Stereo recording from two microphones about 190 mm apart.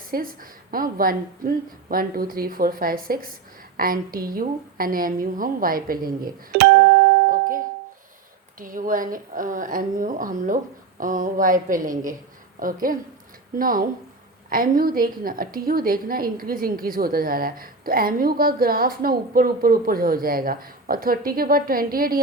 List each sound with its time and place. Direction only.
0.1 s a woman's voice: 50° right (ahead or behind)